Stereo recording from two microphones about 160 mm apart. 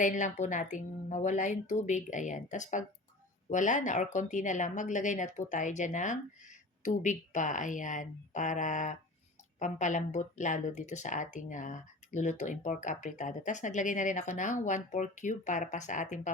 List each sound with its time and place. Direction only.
0.0 s speech: 55° left (ahead or behind)